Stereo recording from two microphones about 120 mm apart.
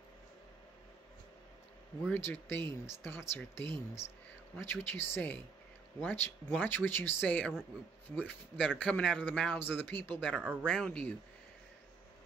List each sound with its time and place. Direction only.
2.1 s speech: 15° left (ahead or behind)
8.5 s speech: 10° left (ahead or behind)